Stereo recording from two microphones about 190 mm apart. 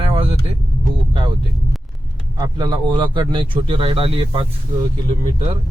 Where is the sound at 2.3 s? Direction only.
20° right (ahead or behind).